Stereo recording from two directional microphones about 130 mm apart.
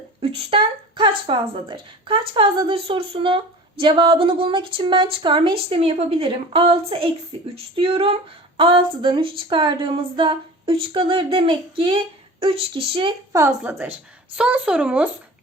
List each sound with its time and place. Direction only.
0.2 s speech: 45° right (ahead or behind)
13.3 s a woman's voice: 25° right (ahead or behind); by 15.1 s 10° right (ahead or behind)